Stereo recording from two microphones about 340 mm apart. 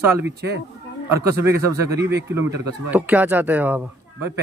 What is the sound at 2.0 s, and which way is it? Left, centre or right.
Speech, right.